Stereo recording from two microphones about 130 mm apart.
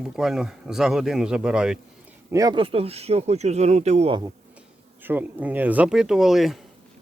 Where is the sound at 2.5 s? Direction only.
45° right (ahead or behind).